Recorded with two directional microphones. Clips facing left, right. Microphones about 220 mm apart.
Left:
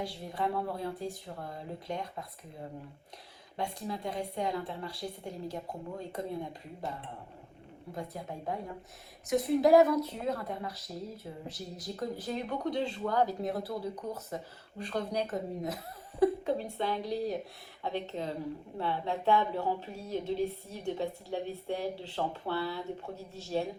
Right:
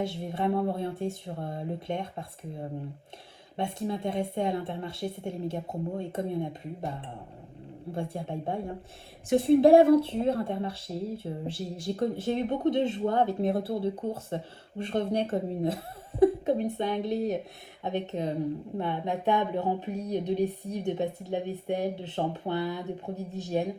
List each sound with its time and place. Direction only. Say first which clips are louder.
0.0 s speech: right 5 dB; 25° right (ahead or behind)